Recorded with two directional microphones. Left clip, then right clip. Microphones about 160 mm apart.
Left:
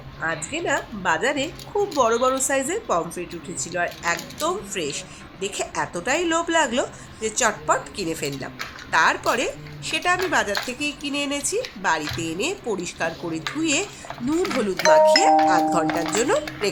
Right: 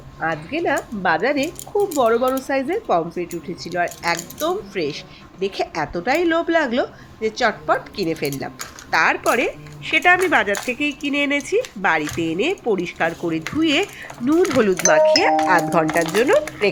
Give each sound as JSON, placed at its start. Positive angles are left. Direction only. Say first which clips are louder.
{"t": 0.2, "sound": "speech", "louder": "right 4 dB", "side_deg": -15}
{"t": 9.2, "sound": "speech", "louder": "right 4 dB", "side_deg": 0}
{"t": 9.9, "sound": "speech", "louder": "right 6 dB", "side_deg": -15}
{"t": 16.1, "sound": "speech", "louder": "right 5 dB", "side_deg": -5}